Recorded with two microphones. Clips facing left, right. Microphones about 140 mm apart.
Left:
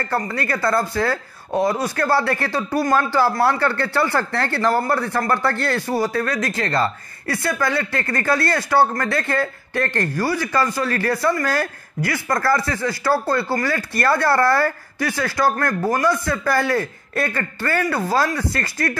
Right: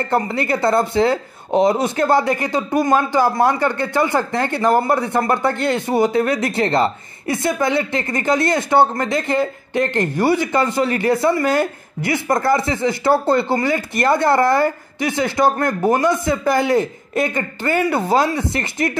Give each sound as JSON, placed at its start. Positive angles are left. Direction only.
{"t": 0.0, "sound": "speech", "side_deg": -25}